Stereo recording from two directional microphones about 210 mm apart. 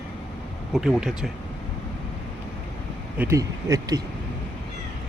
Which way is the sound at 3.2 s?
15° right (ahead or behind).